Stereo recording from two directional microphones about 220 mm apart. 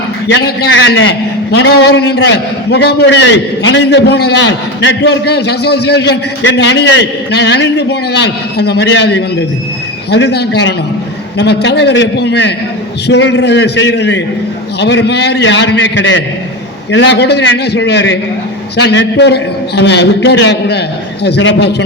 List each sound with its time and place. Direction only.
0.3 s a man's voice: 50° left (ahead or behind)